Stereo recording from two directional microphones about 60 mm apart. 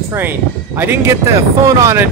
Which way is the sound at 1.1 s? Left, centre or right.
Right.